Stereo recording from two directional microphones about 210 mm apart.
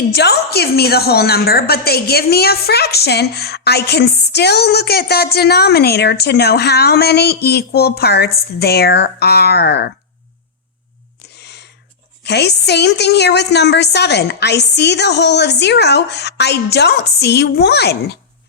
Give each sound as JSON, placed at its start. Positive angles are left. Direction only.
{"t": 0.1, "sound": "a woman's voice", "side_deg": 50}
{"t": 11.3, "sound": "a sound", "side_deg": 50}
{"t": 12.2, "sound": "a woman's voice", "side_deg": 50}